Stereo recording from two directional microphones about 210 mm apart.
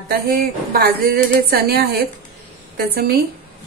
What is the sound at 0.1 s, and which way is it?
Speech, 45° right (ahead or behind).